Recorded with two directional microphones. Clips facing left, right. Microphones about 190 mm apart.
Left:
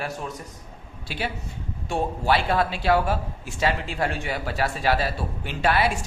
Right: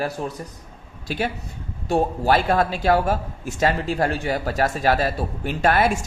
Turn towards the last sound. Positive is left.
turn(degrees=-45)  # may be behind; listen again after turning